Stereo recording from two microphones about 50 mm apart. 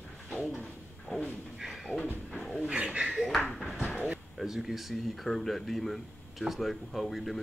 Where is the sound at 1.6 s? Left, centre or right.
Centre.